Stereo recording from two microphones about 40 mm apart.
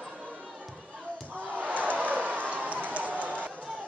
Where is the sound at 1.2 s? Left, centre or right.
Right.